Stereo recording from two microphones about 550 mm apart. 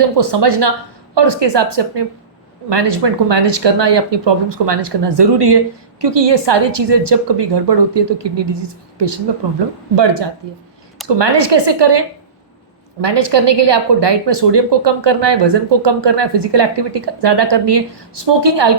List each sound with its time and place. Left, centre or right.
0.0 s a woman's voice: right